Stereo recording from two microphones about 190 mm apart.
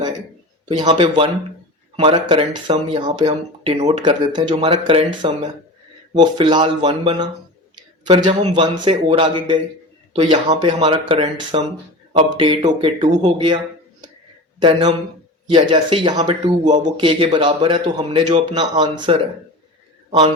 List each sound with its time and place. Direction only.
0.7 s speech: 25° right (ahead or behind)
14.6 s a man's voice: 25° right (ahead or behind)